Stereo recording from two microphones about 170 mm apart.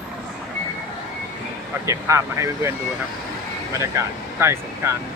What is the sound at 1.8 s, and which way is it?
Speech, 15° right (ahead or behind).